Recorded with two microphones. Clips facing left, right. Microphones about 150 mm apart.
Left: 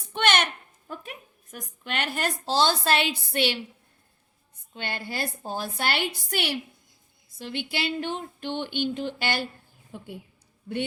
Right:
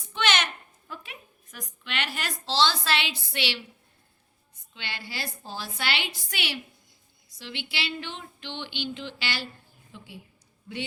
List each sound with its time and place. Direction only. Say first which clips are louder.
0.1 s a sound: left 3 dB; 50° left (ahead or behind)
1.5 s a woman's voice: left 4 dB; 45° left (ahead or behind)
4.7 s a woman's voice: left 6 dB; 50° left (ahead or behind)